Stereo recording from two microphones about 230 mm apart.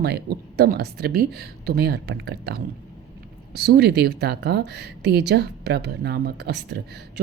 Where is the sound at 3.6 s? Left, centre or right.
Right.